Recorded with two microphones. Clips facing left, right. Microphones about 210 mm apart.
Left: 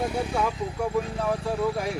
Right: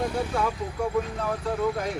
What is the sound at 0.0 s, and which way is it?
Vehicle, 15° left (ahead or behind).